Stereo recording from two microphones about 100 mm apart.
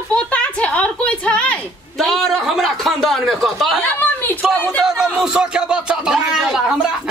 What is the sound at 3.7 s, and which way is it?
Speech, 20° left (ahead or behind).